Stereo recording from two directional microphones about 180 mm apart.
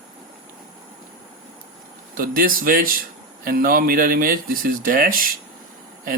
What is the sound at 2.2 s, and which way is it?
A man's voice, 50° right (ahead or behind).